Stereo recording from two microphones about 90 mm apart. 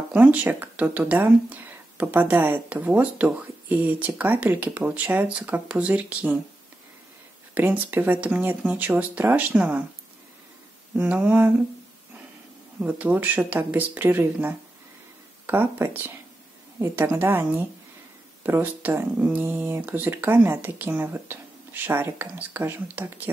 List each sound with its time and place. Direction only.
0.1 s speech: 20° right (ahead or behind)
7.5 s speech: 20° right (ahead or behind)
11.0 s speech: 15° right (ahead or behind)
12.8 s speech: 20° right (ahead or behind)